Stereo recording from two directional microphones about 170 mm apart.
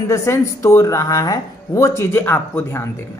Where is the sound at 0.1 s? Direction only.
15° left (ahead or behind).